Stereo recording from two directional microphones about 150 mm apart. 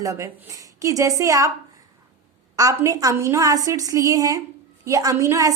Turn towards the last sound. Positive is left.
turn(degrees=-20)  # may be behind; listen again after turning